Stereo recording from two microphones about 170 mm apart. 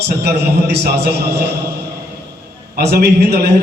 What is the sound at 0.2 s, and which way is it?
Speech, 75° right (ahead or behind).